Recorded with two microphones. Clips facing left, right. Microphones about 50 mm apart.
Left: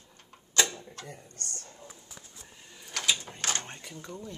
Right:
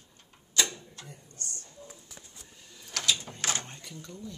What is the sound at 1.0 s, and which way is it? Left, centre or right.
Speech, left.